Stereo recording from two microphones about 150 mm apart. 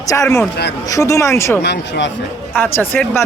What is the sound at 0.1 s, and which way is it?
Speech, 20° left (ahead or behind).